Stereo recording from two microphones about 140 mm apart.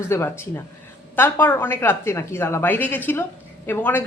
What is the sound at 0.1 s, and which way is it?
Speech, 20° left (ahead or behind).